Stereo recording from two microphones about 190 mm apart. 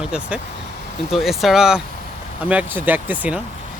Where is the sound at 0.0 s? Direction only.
5° right (ahead or behind).